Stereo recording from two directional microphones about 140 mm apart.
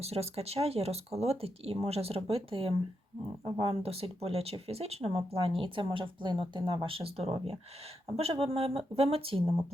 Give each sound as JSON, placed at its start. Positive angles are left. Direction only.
{"t": 0.0, "sound": "speech", "side_deg": -45}